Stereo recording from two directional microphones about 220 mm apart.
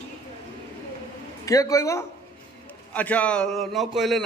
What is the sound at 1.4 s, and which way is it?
A man's voice, 15° left (ahead or behind).